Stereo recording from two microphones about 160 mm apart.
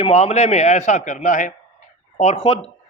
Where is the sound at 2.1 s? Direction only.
40° left (ahead or behind).